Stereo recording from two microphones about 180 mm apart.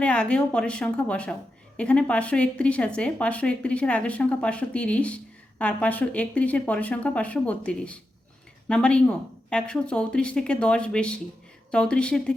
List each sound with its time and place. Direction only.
0.0 s a woman's voice: 5° left (ahead or behind)